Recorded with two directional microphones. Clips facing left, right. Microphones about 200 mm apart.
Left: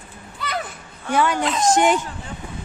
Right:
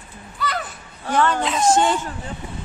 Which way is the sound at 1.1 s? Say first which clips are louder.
Even; 35° right (ahead or behind).